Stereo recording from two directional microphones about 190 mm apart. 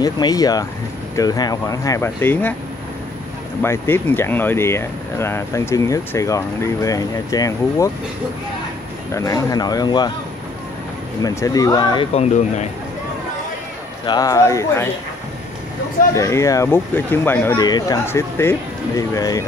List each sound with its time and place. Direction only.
0.0 s speech: 20° left (ahead or behind)
3.6 s speech: 10° left (ahead or behind)
9.1 s speech: 15° left (ahead or behind)
11.2 s speech: 20° left (ahead or behind)
12.1 s speech: 35° left (ahead or behind)
14.0 s speech: 20° left (ahead or behind)
16.2 s speech: 15° left (ahead or behind)
17.6 s speech: 20° left (ahead or behind)